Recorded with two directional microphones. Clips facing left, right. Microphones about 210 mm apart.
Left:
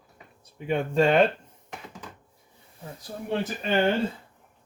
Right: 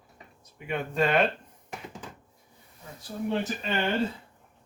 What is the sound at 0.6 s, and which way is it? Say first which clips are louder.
Speech: left 6 dB; 30° left (ahead or behind).